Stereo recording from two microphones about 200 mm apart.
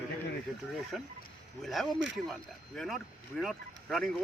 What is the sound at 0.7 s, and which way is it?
Speech, centre (ahead or behind).